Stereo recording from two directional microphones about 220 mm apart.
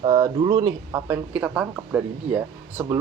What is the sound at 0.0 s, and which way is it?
Speech, 20° right (ahead or behind).